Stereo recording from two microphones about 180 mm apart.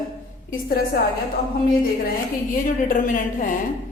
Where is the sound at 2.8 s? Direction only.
45° left (ahead or behind).